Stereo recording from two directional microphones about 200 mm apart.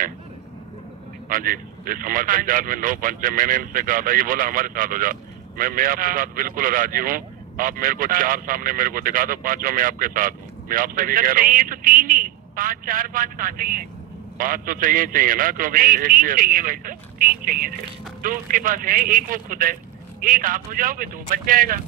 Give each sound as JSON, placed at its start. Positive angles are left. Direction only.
{"t": 1.3, "sound": "a man's voice", "side_deg": -45}